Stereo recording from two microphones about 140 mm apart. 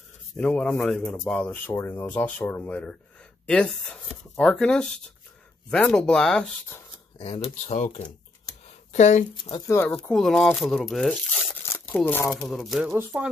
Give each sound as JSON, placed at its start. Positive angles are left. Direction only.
{"t": 0.4, "sound": "speech", "side_deg": 10}
{"t": 7.2, "sound": "speech", "side_deg": 45}
{"t": 7.6, "sound": "speech", "side_deg": 60}
{"t": 8.6, "sound": "a sound", "side_deg": 55}
{"t": 9.3, "sound": "speech", "side_deg": 35}
{"t": 9.7, "sound": "speech", "side_deg": 10}
{"t": 11.6, "sound": "tearing", "side_deg": 15}
{"t": 12.1, "sound": "speech", "side_deg": 15}
{"t": 12.4, "sound": "speech", "side_deg": 0}
{"t": 12.8, "sound": "speech", "side_deg": -15}